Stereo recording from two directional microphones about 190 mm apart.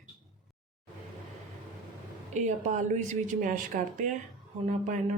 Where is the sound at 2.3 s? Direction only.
40° right (ahead or behind).